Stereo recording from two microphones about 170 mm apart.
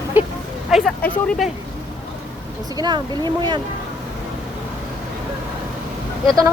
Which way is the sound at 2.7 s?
25° right (ahead or behind).